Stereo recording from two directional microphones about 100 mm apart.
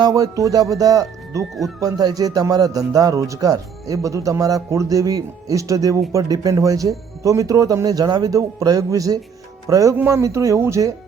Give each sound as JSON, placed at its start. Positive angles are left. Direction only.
{"t": 0.0, "sound": "speech", "side_deg": -35}